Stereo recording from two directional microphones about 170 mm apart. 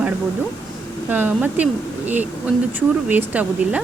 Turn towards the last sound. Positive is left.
turn(degrees=-10)  # may be behind; listen again after turning